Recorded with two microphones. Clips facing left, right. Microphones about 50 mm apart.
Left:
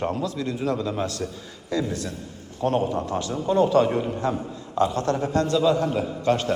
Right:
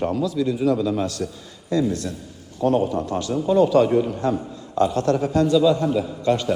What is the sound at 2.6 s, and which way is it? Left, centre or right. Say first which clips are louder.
A man's voice: right 3 dB; left.